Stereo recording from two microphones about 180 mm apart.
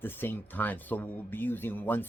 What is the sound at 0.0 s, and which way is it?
Speech, 10° left (ahead or behind).